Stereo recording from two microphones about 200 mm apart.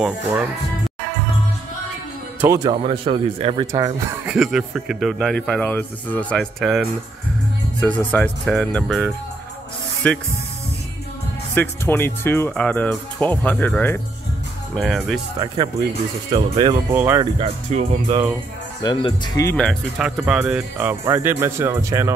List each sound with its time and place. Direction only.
2.4 s speech: 15° right (ahead or behind)
2.7 s speech: 25° right (ahead or behind)
4.3 s speech: 5° right (ahead or behind)
11.5 s speech: 10° left (ahead or behind)
14.8 s speech: centre (ahead or behind)
15.3 s speech: 20° right (ahead or behind)
16.9 s speech: 10° right (ahead or behind)
17.4 s speech: 30° right (ahead or behind)
18.8 s speech: 20° left (ahead or behind)
19.4 s speech: 5° left (ahead or behind); by 22.1 s 15° right (ahead or behind)